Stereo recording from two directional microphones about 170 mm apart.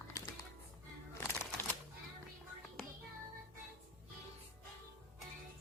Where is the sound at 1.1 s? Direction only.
15° left (ahead or behind).